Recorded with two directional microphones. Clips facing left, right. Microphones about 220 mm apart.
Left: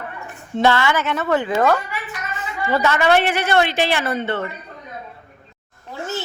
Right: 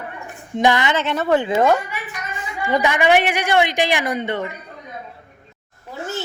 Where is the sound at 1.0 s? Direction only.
35° right (ahead or behind); by 4.5 s 15° right (ahead or behind).